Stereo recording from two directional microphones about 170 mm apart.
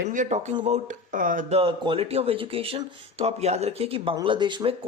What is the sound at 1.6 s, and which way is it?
Speech, 30° right (ahead or behind).